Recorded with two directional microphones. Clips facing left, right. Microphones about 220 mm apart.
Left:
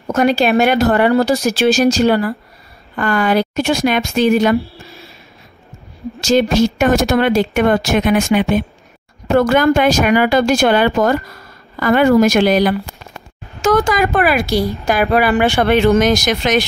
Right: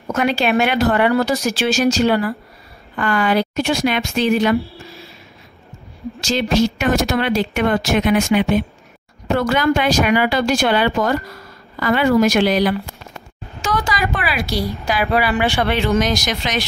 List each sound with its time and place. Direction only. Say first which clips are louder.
0.1 s a woman's voice: left 4 dB; 40° left (ahead or behind)
1.1 s a woman's voice: left 4 dB; 30° left (ahead or behind)
6.2 s a woman's voice: left 4 dB; 45° left (ahead or behind)